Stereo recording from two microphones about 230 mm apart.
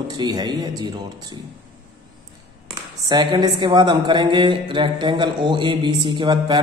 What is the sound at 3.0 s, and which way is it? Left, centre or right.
A woman's voice, centre.